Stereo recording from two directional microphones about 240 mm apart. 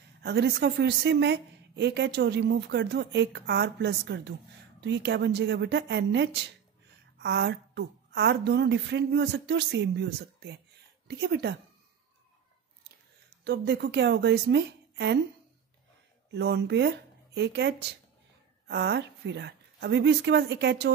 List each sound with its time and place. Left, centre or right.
0.2 s a woman's voice: right
13.4 s a woman's voice: right
16.3 s a woman's voice: right